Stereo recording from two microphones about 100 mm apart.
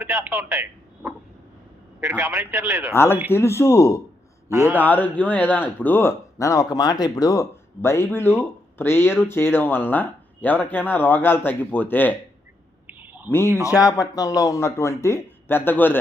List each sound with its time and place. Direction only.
0.0 s speech: 25° right (ahead or behind)
1.0 s a sound: 20° right (ahead or behind)
2.0 s a man's voice: 25° right (ahead or behind)
2.9 s speech: 25° left (ahead or behind)
4.8 s speech: 15° left (ahead or behind); by 7.4 s 35° left (ahead or behind)
7.8 s speech: 25° left (ahead or behind)
12.9 s owl: 20° right (ahead or behind)
13.3 s speech: 25° left (ahead or behind)
13.7 s speech: 40° left (ahead or behind); by 16.0 s 20° left (ahead or behind)